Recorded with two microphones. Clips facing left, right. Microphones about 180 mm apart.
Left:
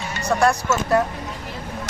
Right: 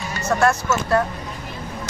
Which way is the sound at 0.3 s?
15° left (ahead or behind).